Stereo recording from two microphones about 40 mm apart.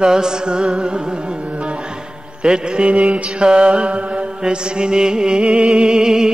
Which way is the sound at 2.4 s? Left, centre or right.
Right.